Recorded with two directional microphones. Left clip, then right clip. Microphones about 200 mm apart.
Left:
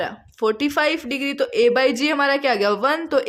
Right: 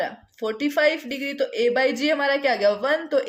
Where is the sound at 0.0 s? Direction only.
50° left (ahead or behind).